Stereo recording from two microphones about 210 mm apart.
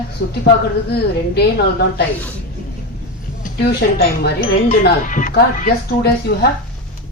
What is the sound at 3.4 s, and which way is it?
Speech, 50° left (ahead or behind).